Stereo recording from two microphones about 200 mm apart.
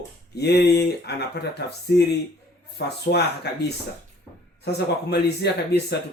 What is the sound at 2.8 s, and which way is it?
Speech, 55° left (ahead or behind).